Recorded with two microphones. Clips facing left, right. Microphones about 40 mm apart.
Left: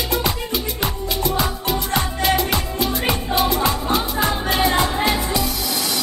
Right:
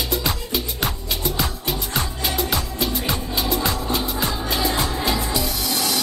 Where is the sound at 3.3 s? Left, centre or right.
Centre.